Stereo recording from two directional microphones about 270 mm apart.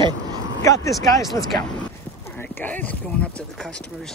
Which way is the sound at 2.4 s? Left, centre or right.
Centre.